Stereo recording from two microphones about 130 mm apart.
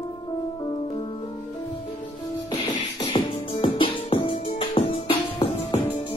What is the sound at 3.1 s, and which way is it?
Music, 40° left (ahead or behind).